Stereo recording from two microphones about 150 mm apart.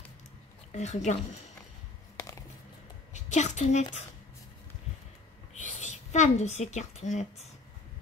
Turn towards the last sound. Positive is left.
turn(degrees=50)  # may be behind; listen again after turning